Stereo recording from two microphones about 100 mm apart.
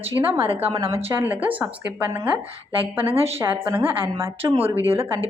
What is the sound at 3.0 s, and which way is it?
Speech, 70° right (ahead or behind).